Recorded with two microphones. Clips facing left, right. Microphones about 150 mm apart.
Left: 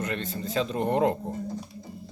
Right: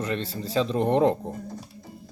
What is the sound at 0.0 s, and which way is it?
Speech, 30° right (ahead or behind).